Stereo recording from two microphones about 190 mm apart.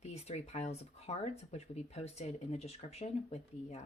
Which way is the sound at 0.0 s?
35° left (ahead or behind).